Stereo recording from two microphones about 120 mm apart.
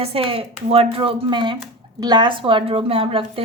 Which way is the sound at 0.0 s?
50° right (ahead or behind).